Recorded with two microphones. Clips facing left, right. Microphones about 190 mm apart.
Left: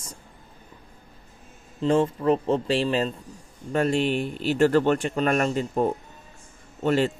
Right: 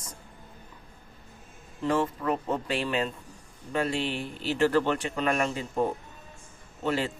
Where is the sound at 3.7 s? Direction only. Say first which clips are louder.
Left 6 dB; 45° left (ahead or behind).